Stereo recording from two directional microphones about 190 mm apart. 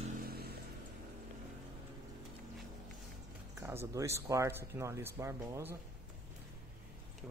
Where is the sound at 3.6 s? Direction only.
10° right (ahead or behind).